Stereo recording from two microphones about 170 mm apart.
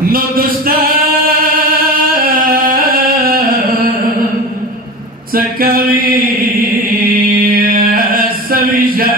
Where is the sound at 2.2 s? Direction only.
60° right (ahead or behind).